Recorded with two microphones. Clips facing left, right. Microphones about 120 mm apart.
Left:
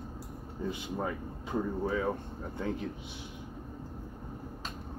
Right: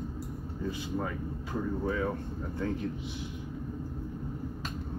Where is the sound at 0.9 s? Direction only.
25° left (ahead or behind).